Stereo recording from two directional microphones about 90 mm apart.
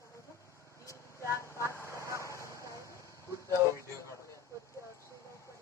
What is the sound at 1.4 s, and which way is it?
Vehicle, 30° left (ahead or behind).